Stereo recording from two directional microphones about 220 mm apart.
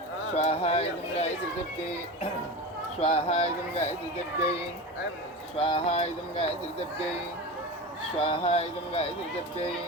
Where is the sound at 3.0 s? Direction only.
25° left (ahead or behind).